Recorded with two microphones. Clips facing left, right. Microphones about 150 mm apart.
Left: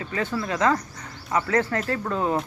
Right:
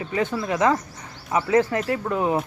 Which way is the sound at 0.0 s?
15° right (ahead or behind).